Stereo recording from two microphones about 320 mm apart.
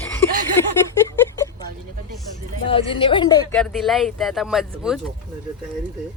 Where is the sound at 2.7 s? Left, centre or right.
Centre.